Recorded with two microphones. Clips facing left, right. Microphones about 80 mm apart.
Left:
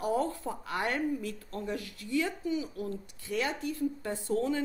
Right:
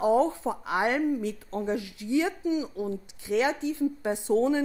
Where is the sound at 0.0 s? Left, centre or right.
Centre.